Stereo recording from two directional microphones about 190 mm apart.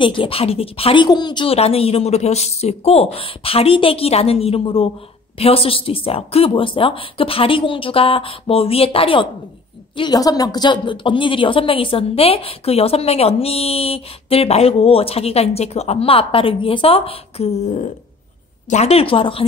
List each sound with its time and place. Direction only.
0.0 s a woman's voice: 25° left (ahead or behind)